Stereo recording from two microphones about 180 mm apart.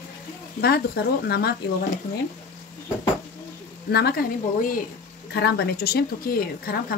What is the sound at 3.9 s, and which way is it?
Speech, 60° left (ahead or behind).